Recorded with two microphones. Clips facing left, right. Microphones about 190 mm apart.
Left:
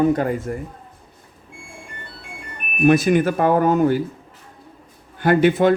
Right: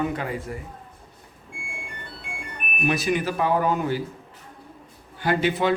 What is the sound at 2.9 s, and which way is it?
A man's voice, 50° left (ahead or behind).